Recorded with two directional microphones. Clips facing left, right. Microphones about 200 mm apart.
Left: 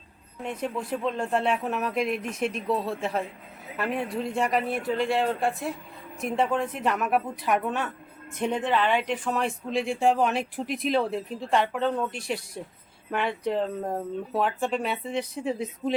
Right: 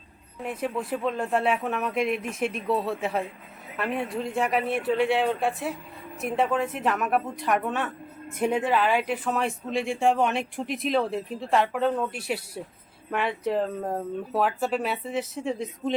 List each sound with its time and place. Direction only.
0.4 s speech: 5° right (ahead or behind)